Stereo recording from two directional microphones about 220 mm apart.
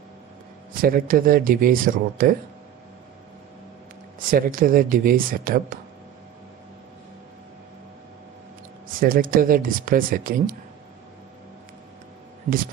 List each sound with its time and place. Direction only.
0.7 s speech: 40° right (ahead or behind)
4.2 s speech: 40° right (ahead or behind)
9.0 s speech: 40° right (ahead or behind)